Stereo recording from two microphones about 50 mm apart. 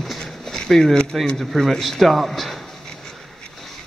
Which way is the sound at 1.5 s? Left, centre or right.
Centre.